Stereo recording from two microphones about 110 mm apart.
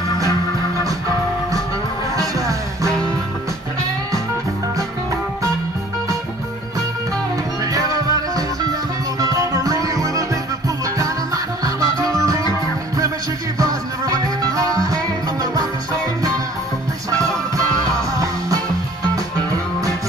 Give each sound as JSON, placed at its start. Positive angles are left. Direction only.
{"t": 2.1, "sound": "music", "side_deg": -30}
{"t": 7.6, "sound": "music", "side_deg": -35}
{"t": 13.6, "sound": "music", "side_deg": -35}